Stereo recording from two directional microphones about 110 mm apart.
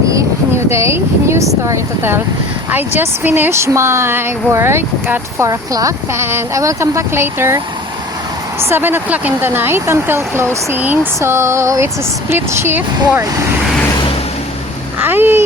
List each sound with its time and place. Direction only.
0.7 s speech: 25° right (ahead or behind)
8.7 s speech: 20° right (ahead or behind)
15.0 s a sound: 20° right (ahead or behind)